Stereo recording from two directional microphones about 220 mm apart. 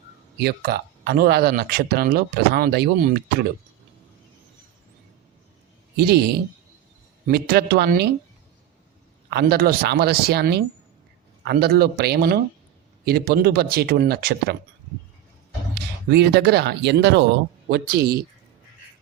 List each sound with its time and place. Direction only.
0.3 s speech: 45° right (ahead or behind)
6.0 s speech: 45° right (ahead or behind)
9.3 s speech: 45° right (ahead or behind)
15.7 s speech: 50° right (ahead or behind)